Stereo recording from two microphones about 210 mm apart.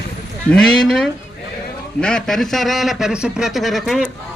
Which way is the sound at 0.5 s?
Centre (ahead or behind).